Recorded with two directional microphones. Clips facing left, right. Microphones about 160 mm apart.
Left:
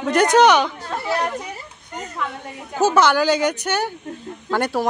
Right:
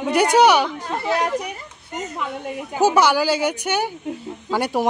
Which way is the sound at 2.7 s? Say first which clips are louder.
Even; 10° right (ahead or behind).